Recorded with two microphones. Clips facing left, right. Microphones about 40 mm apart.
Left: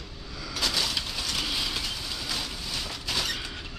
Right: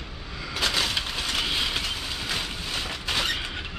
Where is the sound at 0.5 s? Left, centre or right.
Right.